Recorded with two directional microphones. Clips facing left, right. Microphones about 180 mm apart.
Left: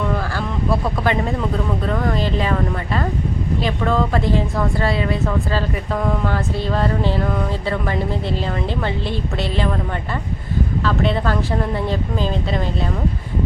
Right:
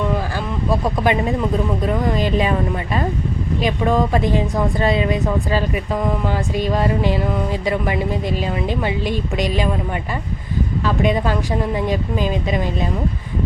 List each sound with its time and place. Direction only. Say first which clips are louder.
0.3 s a woman's voice: even; 15° right (ahead or behind)
10.8 s a woman's voice: right 2 dB; 15° right (ahead or behind)